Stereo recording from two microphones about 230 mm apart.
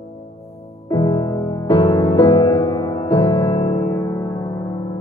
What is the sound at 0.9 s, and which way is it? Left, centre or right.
Music, centre.